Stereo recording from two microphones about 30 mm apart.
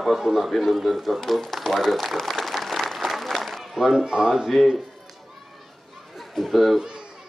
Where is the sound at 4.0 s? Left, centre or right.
Right.